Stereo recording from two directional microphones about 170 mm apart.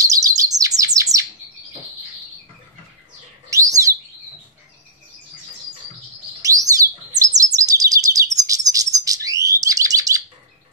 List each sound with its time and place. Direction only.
0.0 s bird: 20° right (ahead or behind)
3.4 s bird: 20° right (ahead or behind)
6.4 s bird: 20° right (ahead or behind)
7.3 s chirp: 20° right (ahead or behind)
8.5 s bird: 20° right (ahead or behind)